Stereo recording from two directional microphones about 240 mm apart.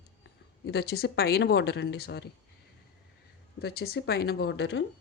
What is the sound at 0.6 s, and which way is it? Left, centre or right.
Speech, left.